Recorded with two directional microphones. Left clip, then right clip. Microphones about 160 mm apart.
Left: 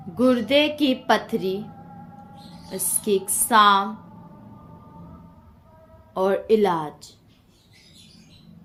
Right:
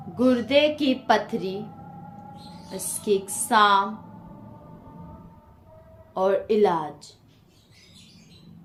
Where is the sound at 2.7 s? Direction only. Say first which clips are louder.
Left 1 dB; 50° left (ahead or behind).